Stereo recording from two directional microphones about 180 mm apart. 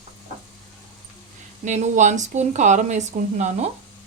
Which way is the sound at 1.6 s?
40° right (ahead or behind).